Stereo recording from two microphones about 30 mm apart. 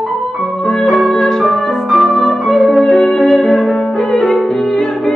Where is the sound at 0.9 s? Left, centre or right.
Centre.